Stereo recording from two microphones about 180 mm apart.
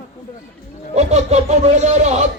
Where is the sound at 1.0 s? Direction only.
40° right (ahead or behind).